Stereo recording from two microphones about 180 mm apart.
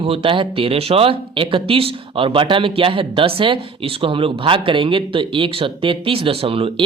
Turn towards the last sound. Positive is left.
turn(degrees=-30)  # may be behind; listen again after turning